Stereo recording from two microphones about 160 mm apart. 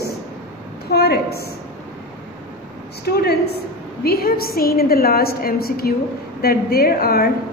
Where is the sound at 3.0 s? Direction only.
80° left.